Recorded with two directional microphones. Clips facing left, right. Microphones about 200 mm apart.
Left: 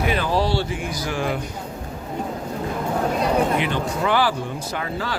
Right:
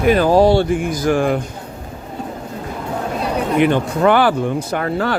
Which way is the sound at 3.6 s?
55° right (ahead or behind).